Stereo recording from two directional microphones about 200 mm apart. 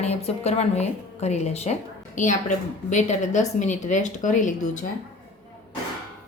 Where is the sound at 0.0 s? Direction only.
30° left (ahead or behind).